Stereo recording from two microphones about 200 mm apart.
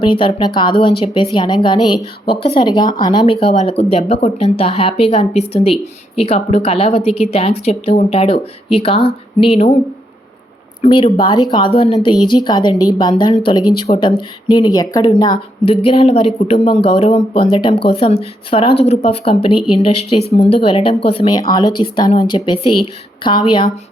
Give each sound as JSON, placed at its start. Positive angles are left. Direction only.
{"t": 0.0, "sound": "speech", "side_deg": 25}
{"t": 10.8, "sound": "speech", "side_deg": 25}